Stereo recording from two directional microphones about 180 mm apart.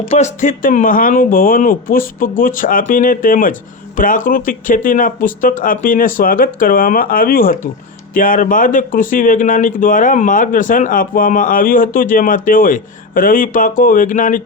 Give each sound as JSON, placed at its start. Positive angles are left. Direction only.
{"t": 0.1, "sound": "speech", "side_deg": 40}